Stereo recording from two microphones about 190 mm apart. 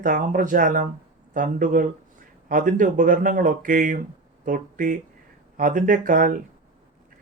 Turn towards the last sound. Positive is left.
turn(degrees=-45)  # may be behind; listen again after turning